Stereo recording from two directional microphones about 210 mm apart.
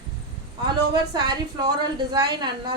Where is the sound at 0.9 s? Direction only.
20° right (ahead or behind).